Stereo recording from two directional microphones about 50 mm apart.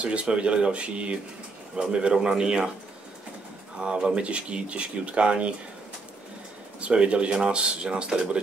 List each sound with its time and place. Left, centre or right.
0.0 s speech: right
3.8 s speech: right
6.8 s speech: right